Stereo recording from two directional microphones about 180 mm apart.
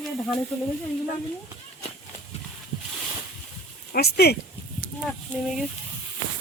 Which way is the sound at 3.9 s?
60° left (ahead or behind).